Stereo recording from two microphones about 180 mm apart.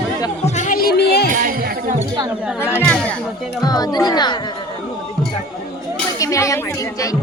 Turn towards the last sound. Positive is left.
turn(degrees=15)  # may be behind; listen again after turning